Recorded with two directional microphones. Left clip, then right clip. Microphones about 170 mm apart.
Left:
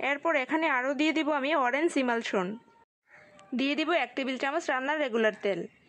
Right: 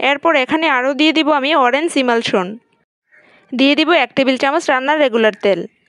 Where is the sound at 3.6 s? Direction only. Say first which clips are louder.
Right 15 dB; 45° right (ahead or behind).